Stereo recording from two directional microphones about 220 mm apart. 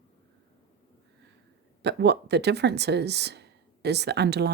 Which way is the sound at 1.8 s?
50° right (ahead or behind).